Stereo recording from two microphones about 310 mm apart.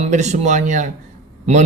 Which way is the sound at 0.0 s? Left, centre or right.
Right.